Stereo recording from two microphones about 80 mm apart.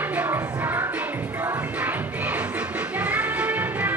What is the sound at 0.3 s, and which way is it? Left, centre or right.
Music, right.